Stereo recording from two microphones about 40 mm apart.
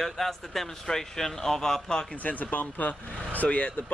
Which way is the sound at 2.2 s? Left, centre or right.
Left.